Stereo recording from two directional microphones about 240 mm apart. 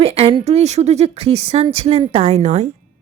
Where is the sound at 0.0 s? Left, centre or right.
Right.